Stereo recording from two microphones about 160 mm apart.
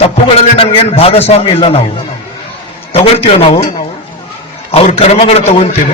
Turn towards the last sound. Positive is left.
turn(degrees=40)  # may be behind; listen again after turning